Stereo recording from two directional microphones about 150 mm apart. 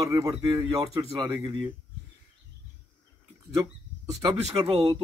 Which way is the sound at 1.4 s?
35° right (ahead or behind).